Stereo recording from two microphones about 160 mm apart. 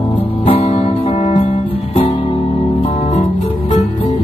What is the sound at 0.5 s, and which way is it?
Music, 35° left (ahead or behind).